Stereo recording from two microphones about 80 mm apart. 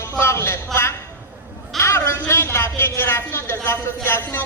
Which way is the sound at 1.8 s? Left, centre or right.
Left.